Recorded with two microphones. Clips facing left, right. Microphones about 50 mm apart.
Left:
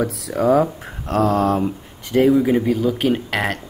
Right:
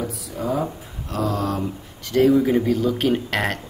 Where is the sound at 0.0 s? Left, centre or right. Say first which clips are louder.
Left 8 dB; left.